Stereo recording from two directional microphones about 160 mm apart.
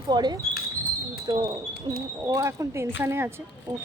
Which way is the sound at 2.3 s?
20° right (ahead or behind).